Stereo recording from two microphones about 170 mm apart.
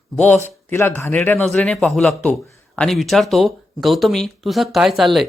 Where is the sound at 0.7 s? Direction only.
15° left (ahead or behind).